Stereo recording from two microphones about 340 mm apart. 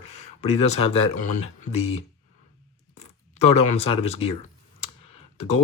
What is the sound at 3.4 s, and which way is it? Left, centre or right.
Speech, centre.